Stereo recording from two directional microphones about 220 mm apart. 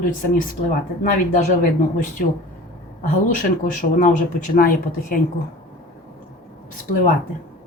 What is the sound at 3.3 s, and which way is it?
Speech, 35° left (ahead or behind).